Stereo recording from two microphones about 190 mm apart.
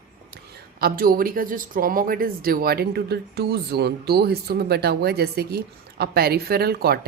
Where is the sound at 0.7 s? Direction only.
50° right (ahead or behind).